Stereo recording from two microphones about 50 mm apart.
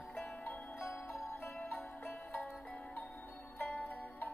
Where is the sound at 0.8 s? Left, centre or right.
Left.